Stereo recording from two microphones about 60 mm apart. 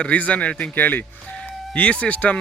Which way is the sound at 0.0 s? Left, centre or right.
Left.